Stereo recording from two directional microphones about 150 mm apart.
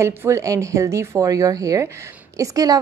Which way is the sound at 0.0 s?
20° right (ahead or behind).